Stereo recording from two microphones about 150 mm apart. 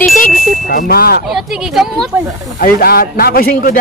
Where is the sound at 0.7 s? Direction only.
80° left.